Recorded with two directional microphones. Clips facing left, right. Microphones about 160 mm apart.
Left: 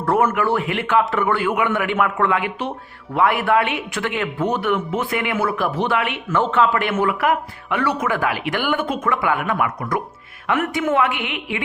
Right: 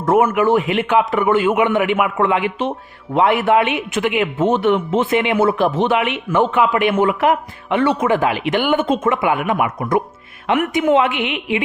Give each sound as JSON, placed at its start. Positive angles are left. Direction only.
{"t": 0.0, "sound": "speech", "side_deg": -15}